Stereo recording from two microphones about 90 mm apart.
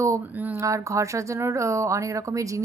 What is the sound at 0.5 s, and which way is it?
A woman's voice, 35° right (ahead or behind).